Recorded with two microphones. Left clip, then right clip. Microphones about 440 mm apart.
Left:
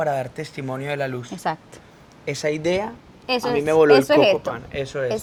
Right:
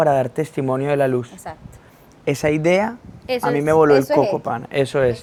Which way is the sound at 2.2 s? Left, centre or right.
Right.